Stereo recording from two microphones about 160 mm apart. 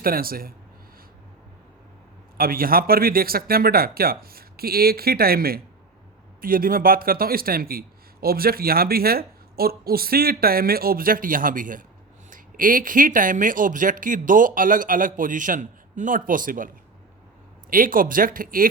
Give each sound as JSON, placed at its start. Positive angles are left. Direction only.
{"t": 0.0, "sound": "a man's voice", "side_deg": -65}
{"t": 2.4, "sound": "a man's voice", "side_deg": -65}